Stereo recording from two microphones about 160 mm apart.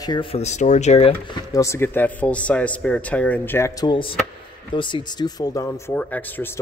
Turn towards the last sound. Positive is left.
turn(degrees=10)  # may be behind; listen again after turning